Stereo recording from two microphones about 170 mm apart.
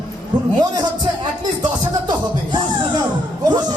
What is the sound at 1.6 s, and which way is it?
Music, 25° right (ahead or behind).